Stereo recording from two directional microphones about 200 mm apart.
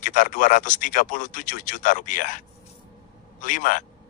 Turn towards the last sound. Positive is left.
turn(degrees=40)  # may be behind; listen again after turning